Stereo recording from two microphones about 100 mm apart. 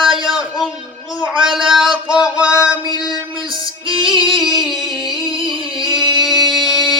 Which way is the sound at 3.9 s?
55° right (ahead or behind).